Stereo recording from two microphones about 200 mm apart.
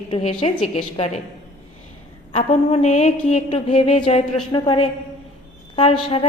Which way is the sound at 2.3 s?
35° left (ahead or behind).